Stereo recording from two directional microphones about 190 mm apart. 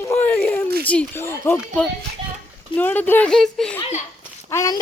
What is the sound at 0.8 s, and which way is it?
Speech, 5° left (ahead or behind).